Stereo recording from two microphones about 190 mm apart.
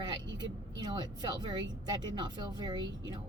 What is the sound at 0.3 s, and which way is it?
A woman's voice, 20° right (ahead or behind).